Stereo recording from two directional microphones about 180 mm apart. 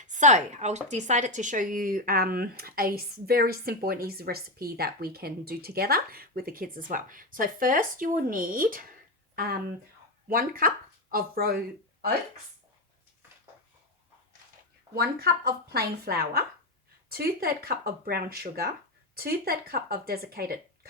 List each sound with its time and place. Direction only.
0.0 s speech: 45° right (ahead or behind)
14.9 s speech: 60° right (ahead or behind)